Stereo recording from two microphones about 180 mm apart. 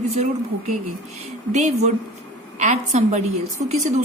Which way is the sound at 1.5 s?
40° right (ahead or behind).